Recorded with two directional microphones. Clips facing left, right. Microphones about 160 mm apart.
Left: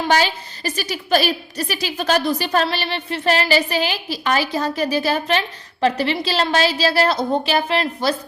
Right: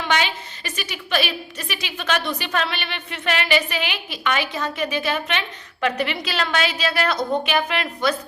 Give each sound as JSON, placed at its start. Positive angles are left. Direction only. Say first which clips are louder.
{"t": 0.0, "sound": "a woman's voice", "louder": "left 4 dB", "side_deg": 35}